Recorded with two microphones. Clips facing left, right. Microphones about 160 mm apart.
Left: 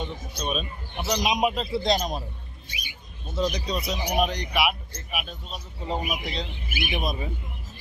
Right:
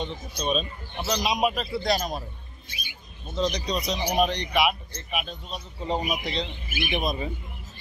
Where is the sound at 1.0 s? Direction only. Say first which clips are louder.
Left 1 dB; 15° left (ahead or behind).